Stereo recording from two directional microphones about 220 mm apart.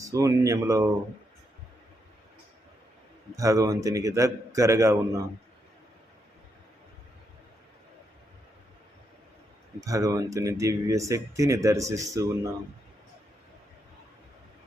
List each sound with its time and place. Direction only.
0.0 s speech: 15° right (ahead or behind)
3.3 s speech: 15° right (ahead or behind)
9.8 s speech: 15° right (ahead or behind)